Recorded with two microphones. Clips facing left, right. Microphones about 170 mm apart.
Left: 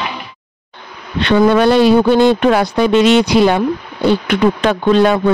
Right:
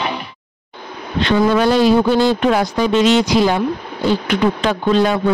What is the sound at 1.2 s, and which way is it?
Speech, 65° left (ahead or behind).